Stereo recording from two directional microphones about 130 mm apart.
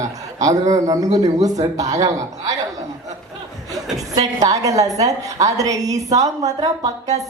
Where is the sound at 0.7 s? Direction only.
25° right (ahead or behind).